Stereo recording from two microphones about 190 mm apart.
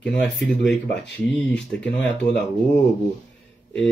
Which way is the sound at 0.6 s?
65° left (ahead or behind).